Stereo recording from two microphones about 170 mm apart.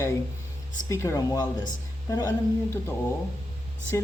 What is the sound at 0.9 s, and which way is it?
Speech, 20° left (ahead or behind).